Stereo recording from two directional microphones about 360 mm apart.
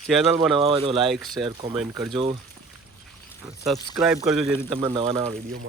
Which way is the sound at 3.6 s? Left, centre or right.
Centre.